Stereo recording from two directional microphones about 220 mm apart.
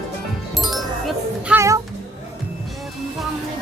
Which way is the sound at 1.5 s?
15° right (ahead or behind).